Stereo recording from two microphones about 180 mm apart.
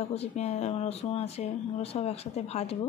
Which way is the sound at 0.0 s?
35° left (ahead or behind).